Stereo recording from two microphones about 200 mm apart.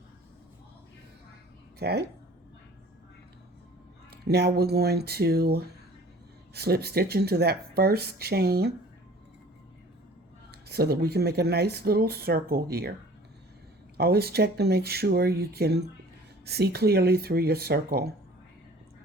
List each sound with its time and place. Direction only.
1.8 s speech: 55° right (ahead or behind)
4.1 s speech: 55° right (ahead or behind)
10.5 s speech: 50° right (ahead or behind)
13.9 s speech: 50° right (ahead or behind)